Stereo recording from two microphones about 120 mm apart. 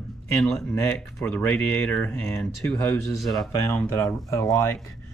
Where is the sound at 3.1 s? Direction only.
Centre (ahead or behind).